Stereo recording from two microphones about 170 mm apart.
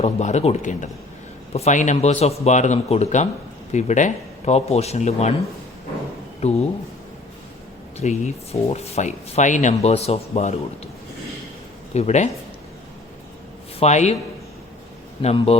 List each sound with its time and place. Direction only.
0.0 s speech: 40° left (ahead or behind)
6.4 s speech: 35° left (ahead or behind)
7.9 s speech: 40° left (ahead or behind)
11.9 s speech: 40° left (ahead or behind)
13.7 s speech: 40° left (ahead or behind)
15.2 s speech: 35° left (ahead or behind)